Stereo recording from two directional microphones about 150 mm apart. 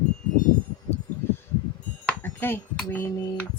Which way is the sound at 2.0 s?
15° left (ahead or behind).